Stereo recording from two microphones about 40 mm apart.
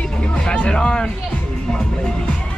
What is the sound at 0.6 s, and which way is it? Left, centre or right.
Music, left.